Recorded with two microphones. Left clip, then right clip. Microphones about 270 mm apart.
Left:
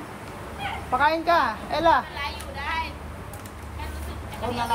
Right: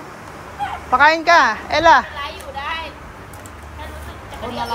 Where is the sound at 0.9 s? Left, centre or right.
Right.